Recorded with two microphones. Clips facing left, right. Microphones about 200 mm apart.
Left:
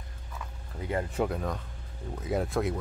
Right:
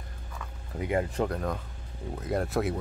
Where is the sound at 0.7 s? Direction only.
15° right (ahead or behind).